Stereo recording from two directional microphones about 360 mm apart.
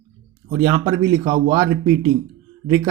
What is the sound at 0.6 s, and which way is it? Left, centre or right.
Speech, centre.